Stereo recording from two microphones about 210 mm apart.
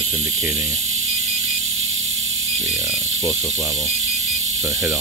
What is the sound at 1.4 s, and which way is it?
Mechanisms, 70° right (ahead or behind).